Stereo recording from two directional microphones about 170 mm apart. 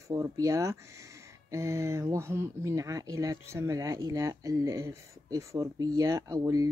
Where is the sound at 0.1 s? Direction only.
20° right (ahead or behind).